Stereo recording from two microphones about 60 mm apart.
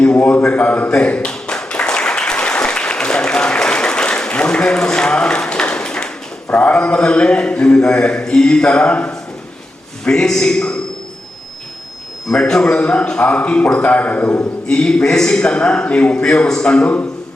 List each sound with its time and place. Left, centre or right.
0.0 s a sound: left
0.4 s a man's voice: left
0.9 s a sound: centre
6.5 s a man's voice: left
12.3 s a man's voice: centre; by 14.4 s left
14.7 s a man's voice: centre